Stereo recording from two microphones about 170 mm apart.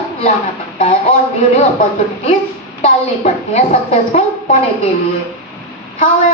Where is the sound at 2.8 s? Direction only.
40° left (ahead or behind).